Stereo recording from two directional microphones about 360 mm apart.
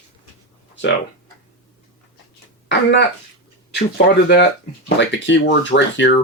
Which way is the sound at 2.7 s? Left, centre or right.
Left.